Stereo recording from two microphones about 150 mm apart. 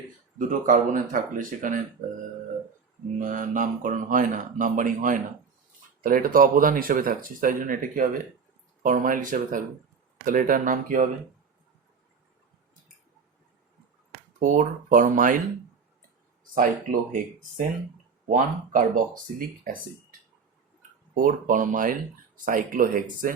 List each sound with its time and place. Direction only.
0.3 s speech: 60° right (ahead or behind)
3.2 s speech: 60° right (ahead or behind)
14.3 s speech: 60° right (ahead or behind)
16.4 s speech: 65° right (ahead or behind)
18.3 s speech: 60° right (ahead or behind)
21.2 s speech: 60° right (ahead or behind)